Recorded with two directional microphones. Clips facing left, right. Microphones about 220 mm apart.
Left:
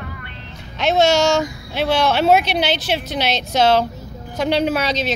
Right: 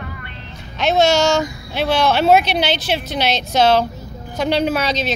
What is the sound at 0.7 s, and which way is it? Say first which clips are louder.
Speech: even; 25° left (ahead or behind).